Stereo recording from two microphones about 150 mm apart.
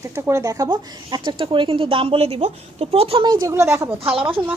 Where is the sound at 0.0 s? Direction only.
20° right (ahead or behind); by 3.2 s 40° right (ahead or behind).